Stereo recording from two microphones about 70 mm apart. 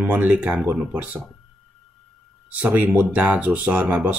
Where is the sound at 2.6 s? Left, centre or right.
Right.